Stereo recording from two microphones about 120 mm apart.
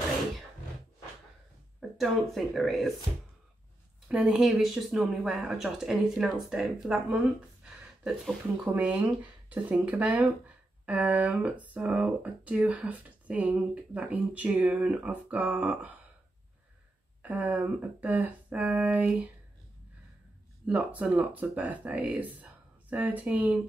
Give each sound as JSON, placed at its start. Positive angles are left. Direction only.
{"t": 1.8, "sound": "speech", "side_deg": 0}
{"t": 4.1, "sound": "speech", "side_deg": -5}
{"t": 8.7, "sound": "speech", "side_deg": -10}
{"t": 17.2, "sound": "speech", "side_deg": -15}
{"t": 20.6, "sound": "speech", "side_deg": -10}